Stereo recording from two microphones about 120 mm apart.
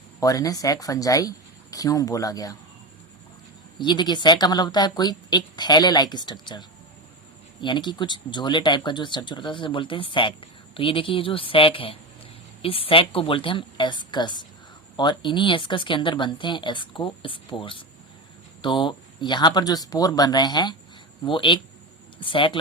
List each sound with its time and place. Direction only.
0.2 s speech: 30° left (ahead or behind)
3.8 s speech: 40° left (ahead or behind)